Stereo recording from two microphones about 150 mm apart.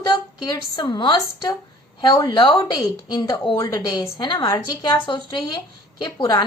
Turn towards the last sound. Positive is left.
turn(degrees=30)  # may be behind; listen again after turning